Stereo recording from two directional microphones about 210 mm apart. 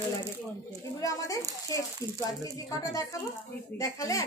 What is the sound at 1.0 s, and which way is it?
A woman's voice, 15° left (ahead or behind).